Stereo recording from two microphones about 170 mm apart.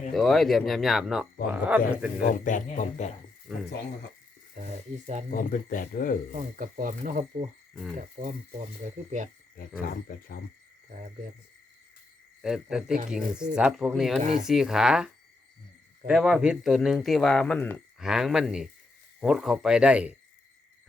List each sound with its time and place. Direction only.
0.1 s speech: centre (ahead or behind)
2.2 s speech: 50° left (ahead or behind)
4.5 s speech: 45° right (ahead or behind)
5.3 s speech: 50° left (ahead or behind)
6.3 s speech: 50° right (ahead or behind)
9.6 s speech: 60° left (ahead or behind)
12.4 s speech: 5° right (ahead or behind)
14.2 s speech: 40° right (ahead or behind)
14.4 s speech: 5° right (ahead or behind)
18.0 s speech: 5° right (ahead or behind)